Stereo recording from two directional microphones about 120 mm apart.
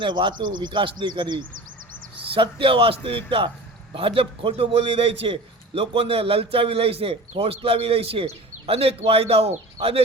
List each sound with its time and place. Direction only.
0.0 s a man's voice: 40° right (ahead or behind); by 10.0 s 60° right (ahead or behind)